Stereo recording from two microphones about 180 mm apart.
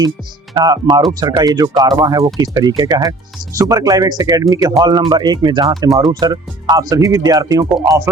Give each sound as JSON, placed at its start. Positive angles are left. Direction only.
{"t": 0.5, "sound": "speech", "side_deg": -20}